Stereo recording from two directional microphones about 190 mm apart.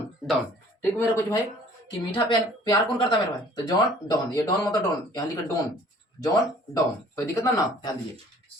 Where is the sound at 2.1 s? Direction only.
25° left (ahead or behind).